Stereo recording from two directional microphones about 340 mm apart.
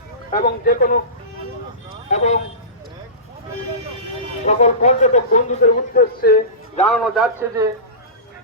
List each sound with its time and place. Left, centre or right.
0.3 s speech: left
2.0 s speech: centre
4.4 s speech: centre
7.0 s a man's voice: centre